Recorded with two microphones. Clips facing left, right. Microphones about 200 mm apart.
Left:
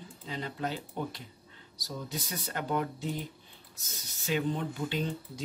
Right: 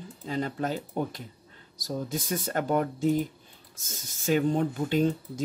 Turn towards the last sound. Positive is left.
turn(degrees=-45)  # may be behind; listen again after turning